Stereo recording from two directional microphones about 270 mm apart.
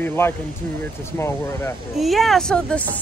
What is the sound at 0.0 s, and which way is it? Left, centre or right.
Speech, centre.